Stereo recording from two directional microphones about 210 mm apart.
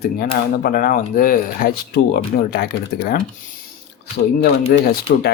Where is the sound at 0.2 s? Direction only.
45° left (ahead or behind).